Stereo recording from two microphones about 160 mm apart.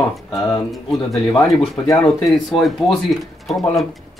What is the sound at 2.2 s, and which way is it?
Speech, centre (ahead or behind).